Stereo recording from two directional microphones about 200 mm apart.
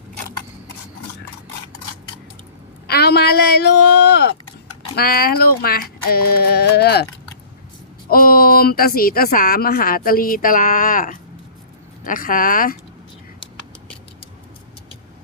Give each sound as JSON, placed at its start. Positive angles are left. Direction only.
{"t": 2.8, "sound": "a woman's voice", "side_deg": 55}
{"t": 4.0, "sound": "a sound", "side_deg": 55}
{"t": 4.9, "sound": "a woman's voice", "side_deg": 50}
{"t": 8.1, "sound": "a woman's voice", "side_deg": 45}